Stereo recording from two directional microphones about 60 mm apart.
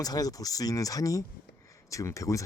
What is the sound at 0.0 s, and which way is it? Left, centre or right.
Speech, left.